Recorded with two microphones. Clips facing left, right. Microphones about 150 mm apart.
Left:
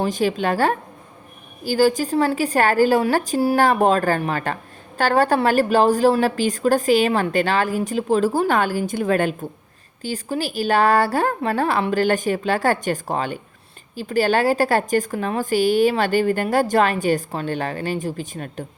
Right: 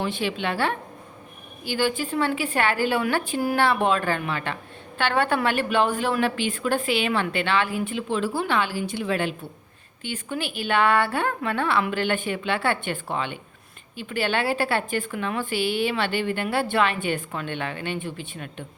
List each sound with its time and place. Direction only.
0.0 s a woman's voice: 40° left (ahead or behind)